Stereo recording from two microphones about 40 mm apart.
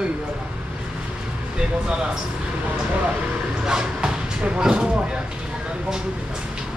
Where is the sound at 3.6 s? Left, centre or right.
Centre.